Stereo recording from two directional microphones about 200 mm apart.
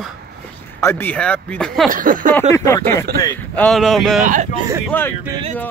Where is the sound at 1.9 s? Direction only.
45° right (ahead or behind).